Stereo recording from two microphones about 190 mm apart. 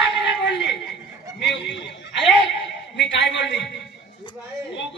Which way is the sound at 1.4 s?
70° left (ahead or behind).